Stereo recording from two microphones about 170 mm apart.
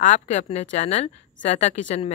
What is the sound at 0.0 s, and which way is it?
Speech, 45° left (ahead or behind).